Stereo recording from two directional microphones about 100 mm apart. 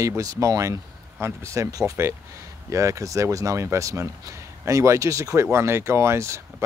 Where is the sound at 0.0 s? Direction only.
35° right (ahead or behind).